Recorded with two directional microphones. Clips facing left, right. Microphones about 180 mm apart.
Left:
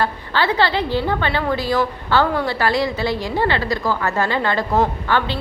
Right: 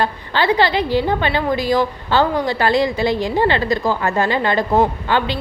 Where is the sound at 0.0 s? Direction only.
15° right (ahead or behind).